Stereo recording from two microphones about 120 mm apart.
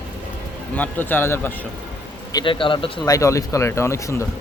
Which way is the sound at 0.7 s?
15° left (ahead or behind).